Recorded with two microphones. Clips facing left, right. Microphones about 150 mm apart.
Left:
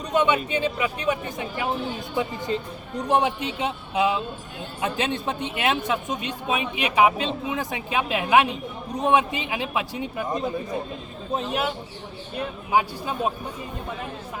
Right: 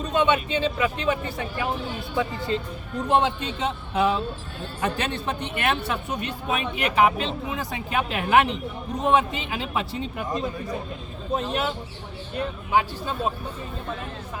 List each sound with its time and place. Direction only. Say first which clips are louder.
0.0 s speech: even; 15° left (ahead or behind)
12.7 s speech: left 1 dB; 15° left (ahead or behind)